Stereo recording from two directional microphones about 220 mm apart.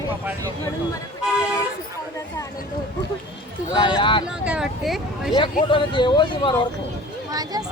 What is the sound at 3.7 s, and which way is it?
Speech, 20° left (ahead or behind).